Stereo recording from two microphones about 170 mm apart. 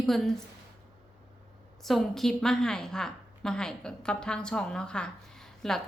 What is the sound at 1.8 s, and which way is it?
A woman's voice, centre (ahead or behind).